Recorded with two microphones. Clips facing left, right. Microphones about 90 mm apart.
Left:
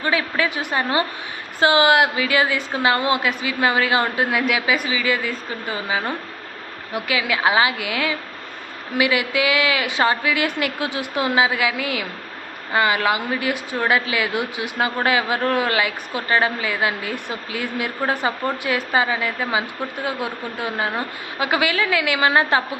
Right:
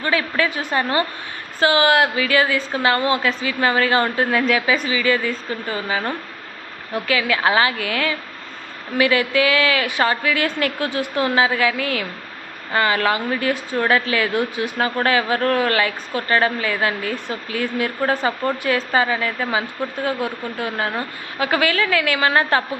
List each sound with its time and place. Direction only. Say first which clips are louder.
0.0 s a woman's voice: right 1 dB; 15° left (ahead or behind)